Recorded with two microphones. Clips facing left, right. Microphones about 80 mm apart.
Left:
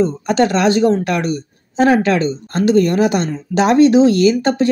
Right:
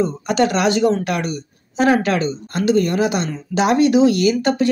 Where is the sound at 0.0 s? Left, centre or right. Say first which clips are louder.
Left 3 dB; left.